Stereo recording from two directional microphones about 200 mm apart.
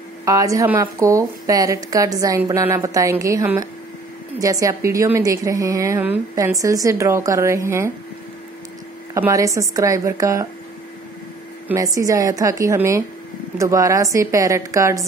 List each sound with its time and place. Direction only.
0.2 s a woman's voice: 15° right (ahead or behind)
9.1 s a woman's voice: 15° right (ahead or behind)
11.6 s a woman's voice: 15° right (ahead or behind)